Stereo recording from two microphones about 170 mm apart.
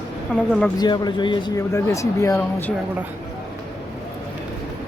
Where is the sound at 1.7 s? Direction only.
15° left (ahead or behind).